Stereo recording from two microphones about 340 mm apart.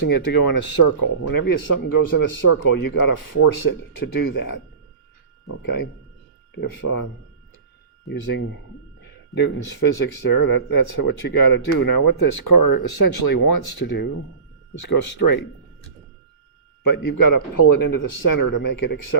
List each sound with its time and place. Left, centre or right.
0.1 s speech: left
4.2 s speech: left
5.6 s speech: left
8.1 s speech: left
14.8 s speech: left
16.8 s speech: left